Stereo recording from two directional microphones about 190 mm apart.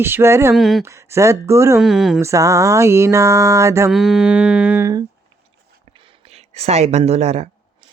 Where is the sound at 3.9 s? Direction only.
Centre (ahead or behind).